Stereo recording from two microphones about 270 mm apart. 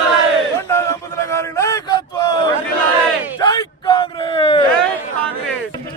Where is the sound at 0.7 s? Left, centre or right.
Centre.